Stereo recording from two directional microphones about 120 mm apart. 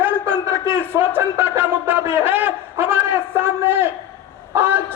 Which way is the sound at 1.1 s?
20° right (ahead or behind).